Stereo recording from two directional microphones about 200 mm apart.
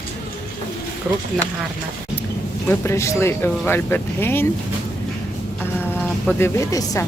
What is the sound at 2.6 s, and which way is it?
Speech, 15° left (ahead or behind).